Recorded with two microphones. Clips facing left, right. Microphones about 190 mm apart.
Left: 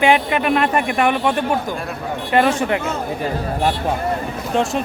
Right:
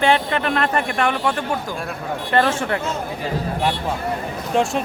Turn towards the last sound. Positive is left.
turn(degrees=0)  # may be behind; listen again after turning